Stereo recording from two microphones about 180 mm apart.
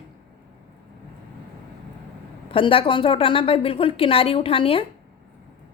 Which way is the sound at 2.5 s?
30° left (ahead or behind).